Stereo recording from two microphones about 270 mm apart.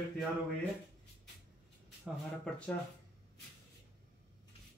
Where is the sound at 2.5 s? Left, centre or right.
Centre.